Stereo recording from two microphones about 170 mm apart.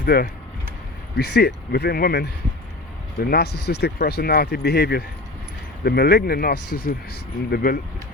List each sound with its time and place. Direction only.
0.0 s speech: 70° left (ahead or behind)